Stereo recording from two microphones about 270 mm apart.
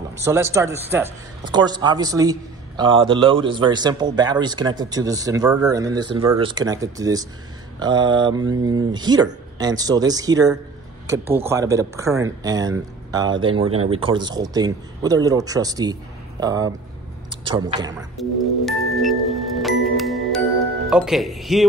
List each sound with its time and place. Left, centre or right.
0.2 s speech: centre
18.2 s speech: centre
18.7 s music: centre
20.9 s speech: centre